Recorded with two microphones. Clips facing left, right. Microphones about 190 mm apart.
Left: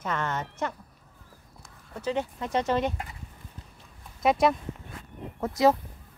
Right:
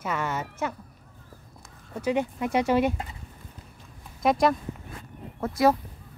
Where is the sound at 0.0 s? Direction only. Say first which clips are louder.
Right 1 dB; 10° right (ahead or behind).